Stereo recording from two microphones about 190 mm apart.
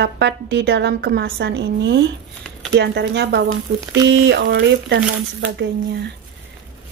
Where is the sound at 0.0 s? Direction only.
65° right (ahead or behind).